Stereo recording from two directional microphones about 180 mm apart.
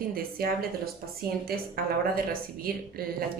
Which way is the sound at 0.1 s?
55° right (ahead or behind).